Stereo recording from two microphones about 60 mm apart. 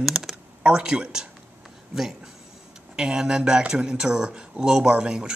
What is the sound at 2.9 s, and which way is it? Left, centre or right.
Speech, centre.